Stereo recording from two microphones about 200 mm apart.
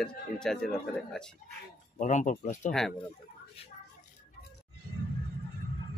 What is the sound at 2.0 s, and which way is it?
Speech, 35° left (ahead or behind).